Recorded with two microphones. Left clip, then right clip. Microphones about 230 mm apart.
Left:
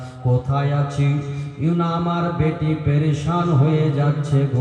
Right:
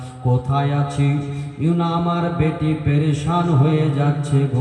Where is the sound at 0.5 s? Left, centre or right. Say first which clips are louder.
Right 2 dB; right.